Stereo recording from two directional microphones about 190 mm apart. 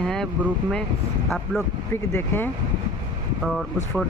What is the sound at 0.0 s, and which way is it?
Vehicle, 5° left (ahead or behind).